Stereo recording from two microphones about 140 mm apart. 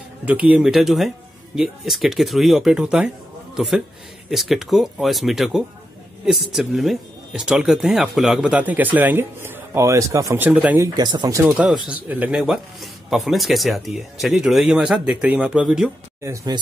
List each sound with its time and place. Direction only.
0.2 s speech: 10° right (ahead or behind)
10.8 s speech: 30° right (ahead or behind)
11.5 s speech: 5° right (ahead or behind)
16.2 s speech: 20° right (ahead or behind)